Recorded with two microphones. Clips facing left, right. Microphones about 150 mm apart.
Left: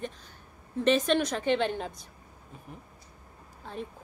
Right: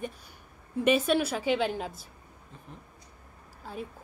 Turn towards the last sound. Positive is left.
turn(degrees=-5)  # may be behind; listen again after turning